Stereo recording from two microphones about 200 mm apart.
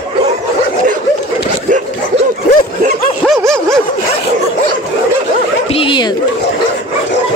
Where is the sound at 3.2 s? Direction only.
Centre (ahead or behind).